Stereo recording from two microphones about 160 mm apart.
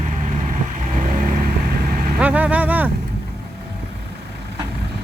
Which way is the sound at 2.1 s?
10° right (ahead or behind).